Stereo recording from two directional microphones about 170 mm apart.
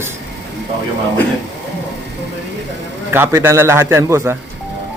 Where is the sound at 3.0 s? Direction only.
10° right (ahead or behind).